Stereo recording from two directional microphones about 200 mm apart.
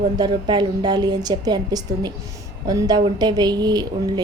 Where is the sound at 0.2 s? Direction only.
20° right (ahead or behind).